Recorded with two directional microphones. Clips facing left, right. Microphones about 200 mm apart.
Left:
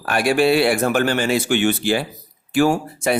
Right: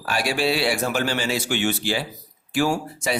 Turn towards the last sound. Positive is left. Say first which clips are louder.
# left 5 dB
turn(degrees=55)  # may be behind; listen again after turning